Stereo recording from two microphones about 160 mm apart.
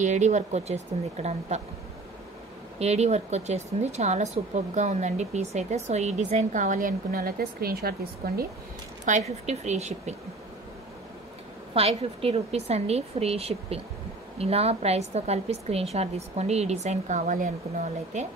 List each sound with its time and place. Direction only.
0.0 s a woman's voice: 50° right (ahead or behind)
2.8 s a woman's voice: 45° right (ahead or behind); by 8.5 s 75° right (ahead or behind)
9.1 s a woman's voice: 50° right (ahead or behind)
11.7 s a woman's voice: 40° right (ahead or behind); by 18.2 s 55° right (ahead or behind)